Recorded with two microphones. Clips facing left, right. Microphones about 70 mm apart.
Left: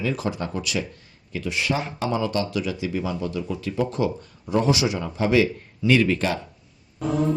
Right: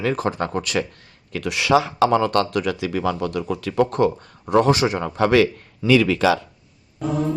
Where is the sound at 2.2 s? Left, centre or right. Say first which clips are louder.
Right 5 dB; right.